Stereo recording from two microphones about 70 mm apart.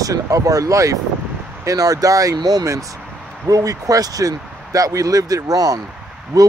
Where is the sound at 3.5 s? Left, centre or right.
Right.